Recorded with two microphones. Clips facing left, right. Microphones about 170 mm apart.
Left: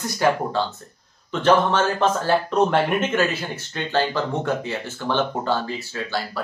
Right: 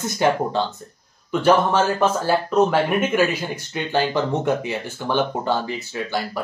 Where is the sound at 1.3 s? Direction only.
10° right (ahead or behind).